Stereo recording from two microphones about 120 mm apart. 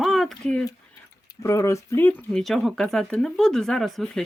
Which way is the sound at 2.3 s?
Centre (ahead or behind).